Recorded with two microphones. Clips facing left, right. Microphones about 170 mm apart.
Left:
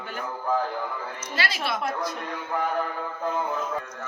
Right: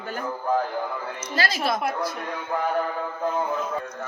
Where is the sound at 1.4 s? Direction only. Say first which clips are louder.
Right 4 dB; 40° right (ahead or behind).